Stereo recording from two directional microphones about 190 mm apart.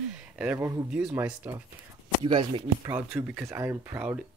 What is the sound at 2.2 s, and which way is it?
Speech, 25° right (ahead or behind).